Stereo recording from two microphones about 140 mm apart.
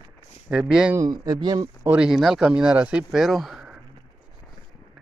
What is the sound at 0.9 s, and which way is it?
Speech, 25° right (ahead or behind).